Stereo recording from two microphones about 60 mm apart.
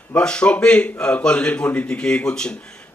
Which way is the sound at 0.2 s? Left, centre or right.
Centre.